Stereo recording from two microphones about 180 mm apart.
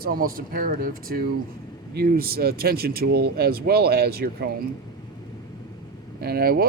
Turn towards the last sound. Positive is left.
turn(degrees=-60)  # may be behind; listen again after turning